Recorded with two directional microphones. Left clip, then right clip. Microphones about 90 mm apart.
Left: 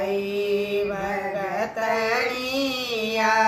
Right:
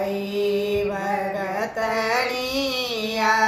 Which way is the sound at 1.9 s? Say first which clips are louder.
Right 3 dB; 20° right (ahead or behind).